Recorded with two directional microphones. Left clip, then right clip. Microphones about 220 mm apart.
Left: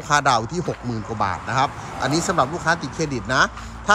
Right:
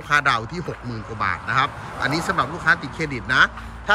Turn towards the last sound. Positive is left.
turn(degrees=30)  # may be behind; listen again after turning